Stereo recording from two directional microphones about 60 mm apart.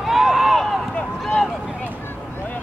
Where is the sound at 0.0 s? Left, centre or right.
Centre.